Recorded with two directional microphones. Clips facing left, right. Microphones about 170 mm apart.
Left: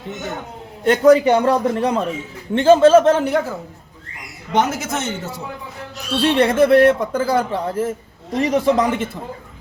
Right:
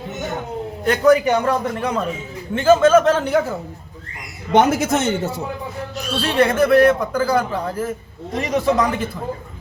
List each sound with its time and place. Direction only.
0.9 s a man's voice: 25° left (ahead or behind)
4.5 s a man's voice: 60° right (ahead or behind)
6.2 s a man's voice: 25° left (ahead or behind)